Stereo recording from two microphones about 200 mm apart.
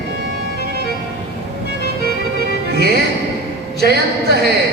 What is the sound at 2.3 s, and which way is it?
Music, 50° right (ahead or behind).